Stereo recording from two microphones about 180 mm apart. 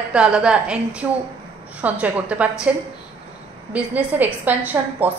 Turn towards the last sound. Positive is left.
turn(degrees=-10)  # may be behind; listen again after turning